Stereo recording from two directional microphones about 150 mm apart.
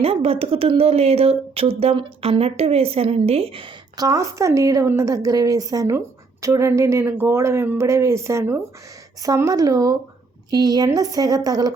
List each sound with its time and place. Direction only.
0.0 s a woman's voice: 40° right (ahead or behind); by 11.7 s 25° right (ahead or behind)